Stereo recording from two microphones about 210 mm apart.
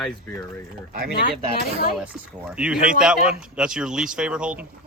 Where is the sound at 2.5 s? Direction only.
5° right (ahead or behind).